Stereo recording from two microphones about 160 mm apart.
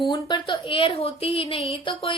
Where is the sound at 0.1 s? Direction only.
30° left (ahead or behind).